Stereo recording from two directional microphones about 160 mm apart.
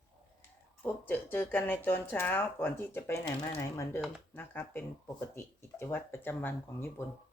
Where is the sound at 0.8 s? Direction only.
10° left (ahead or behind).